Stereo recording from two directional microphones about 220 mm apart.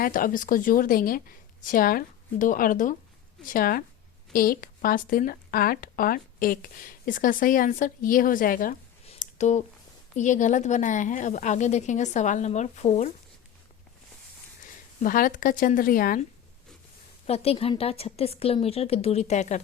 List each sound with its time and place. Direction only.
0.0 s speech: 40° left (ahead or behind)
9.0 s a sound: 30° left (ahead or behind)
10.2 s speech: 35° left (ahead or behind)
15.0 s speech: 40° left (ahead or behind)
17.2 s a woman's voice: 25° left (ahead or behind)